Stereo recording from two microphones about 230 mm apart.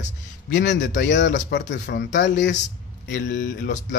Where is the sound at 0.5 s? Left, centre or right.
Left.